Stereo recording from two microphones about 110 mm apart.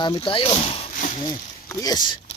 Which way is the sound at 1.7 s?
35° left (ahead or behind).